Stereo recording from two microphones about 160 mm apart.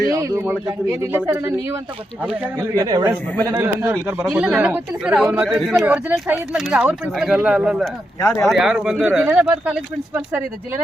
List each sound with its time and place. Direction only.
0.1 s speech: 20° right (ahead or behind)